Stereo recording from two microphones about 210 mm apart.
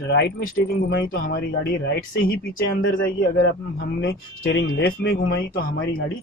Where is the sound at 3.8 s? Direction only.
60° left (ahead or behind).